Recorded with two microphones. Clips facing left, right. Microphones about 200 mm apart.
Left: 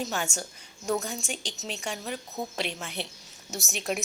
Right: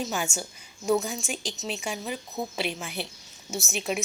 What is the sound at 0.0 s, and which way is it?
A woman's voice, 5° right (ahead or behind).